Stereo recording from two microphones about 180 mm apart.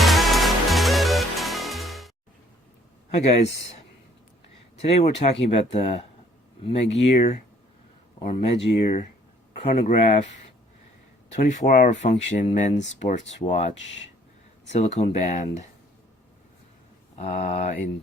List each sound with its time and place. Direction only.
0.0 s music: centre (ahead or behind)
4.8 s speech: 35° left (ahead or behind)
11.3 s speech: 45° left (ahead or behind)
17.2 s speech: 35° left (ahead or behind)